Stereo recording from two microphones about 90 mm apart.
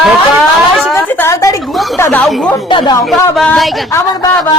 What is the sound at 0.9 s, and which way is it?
Speech, 30° left (ahead or behind).